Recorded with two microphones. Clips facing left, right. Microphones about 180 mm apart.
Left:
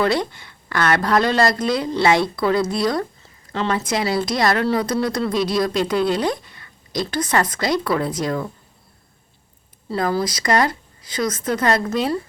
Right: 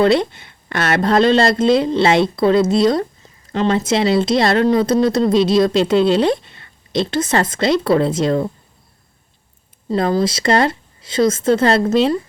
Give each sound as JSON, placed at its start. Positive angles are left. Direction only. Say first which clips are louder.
{"t": 0.0, "sound": "speech", "louder": "right 6 dB", "side_deg": -25}
{"t": 9.9, "sound": "speech", "louder": "right 5 dB", "side_deg": -20}